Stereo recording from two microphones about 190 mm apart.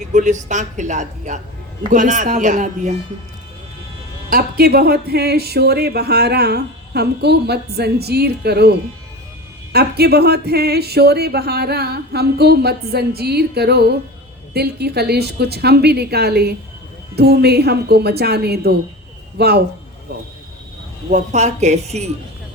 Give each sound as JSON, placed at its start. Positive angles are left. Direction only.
{"t": 0.1, "sound": "a woman's voice", "side_deg": -40}
{"t": 4.3, "sound": "speech", "side_deg": -50}
{"t": 9.7, "sound": "speech", "side_deg": -55}
{"t": 21.1, "sound": "a woman's voice", "side_deg": -40}